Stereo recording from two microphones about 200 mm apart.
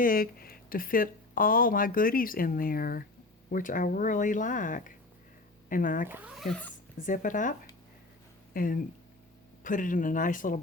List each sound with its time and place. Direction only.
0.0 s speech: 45° left (ahead or behind)
6.1 s speech: 10° right (ahead or behind)
7.0 s speech: 40° left (ahead or behind)
8.5 s speech: 45° left (ahead or behind)